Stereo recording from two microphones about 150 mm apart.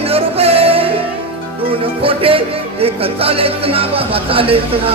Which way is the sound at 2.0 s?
40° right (ahead or behind).